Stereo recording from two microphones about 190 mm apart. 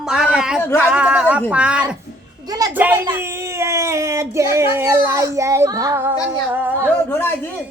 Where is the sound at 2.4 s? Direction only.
20° right (ahead or behind).